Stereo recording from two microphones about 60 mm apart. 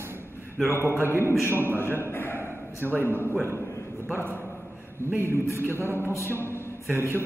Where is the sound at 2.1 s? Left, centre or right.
Left.